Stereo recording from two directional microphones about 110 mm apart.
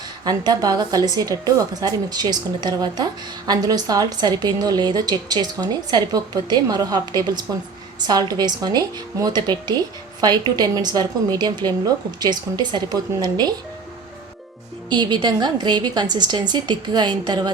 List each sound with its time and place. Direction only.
0.3 s a woman's voice: 35° right (ahead or behind)
14.8 s a woman's voice: 40° right (ahead or behind)